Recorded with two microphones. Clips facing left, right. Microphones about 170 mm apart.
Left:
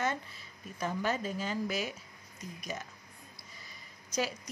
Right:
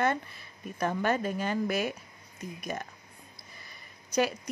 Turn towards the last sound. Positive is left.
turn(degrees=-60)  # may be behind; listen again after turning